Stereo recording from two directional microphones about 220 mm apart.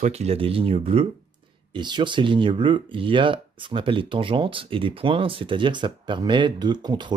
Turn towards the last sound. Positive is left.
turn(degrees=-20)  # may be behind; listen again after turning